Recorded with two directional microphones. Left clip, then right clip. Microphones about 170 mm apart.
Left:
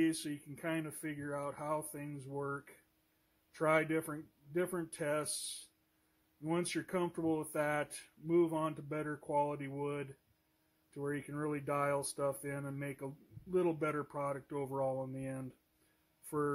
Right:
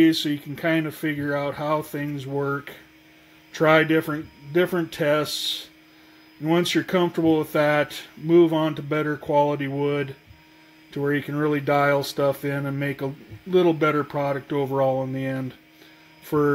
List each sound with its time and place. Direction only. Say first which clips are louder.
0.0 s speech: right 16 dB; 5° right (ahead or behind)
6.4 s speech: right 16 dB; centre (ahead or behind)
16.3 s mains hum: right 16 dB; 5° right (ahead or behind)